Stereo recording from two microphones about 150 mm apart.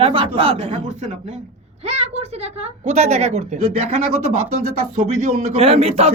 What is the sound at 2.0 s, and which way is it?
Speech, 45° right (ahead or behind).